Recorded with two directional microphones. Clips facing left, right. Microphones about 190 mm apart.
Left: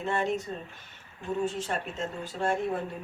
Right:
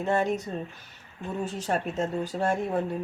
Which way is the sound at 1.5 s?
40° right (ahead or behind).